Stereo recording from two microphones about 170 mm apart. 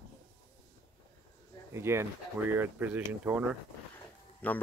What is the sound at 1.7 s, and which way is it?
Speech, 15° right (ahead or behind).